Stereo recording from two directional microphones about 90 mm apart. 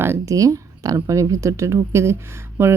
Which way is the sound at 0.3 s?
40° right (ahead or behind).